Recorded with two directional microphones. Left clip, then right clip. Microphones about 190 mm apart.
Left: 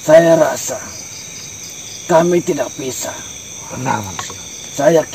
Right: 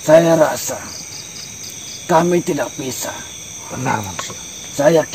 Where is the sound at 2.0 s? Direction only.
15° right (ahead or behind).